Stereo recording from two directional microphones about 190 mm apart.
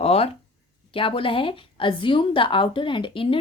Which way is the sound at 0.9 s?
30° left (ahead or behind).